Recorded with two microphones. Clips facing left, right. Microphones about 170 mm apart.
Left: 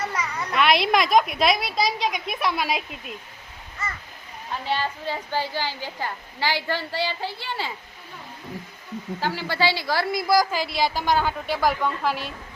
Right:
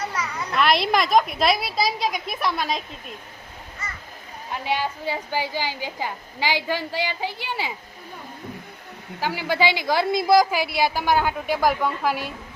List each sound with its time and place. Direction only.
0.1 s a child's voice: 5° right (ahead or behind)
4.6 s a woman's voice: 15° right (ahead or behind)
9.2 s a woman's voice: 10° right (ahead or behind)
10.8 s a woman's voice: 10° right (ahead or behind)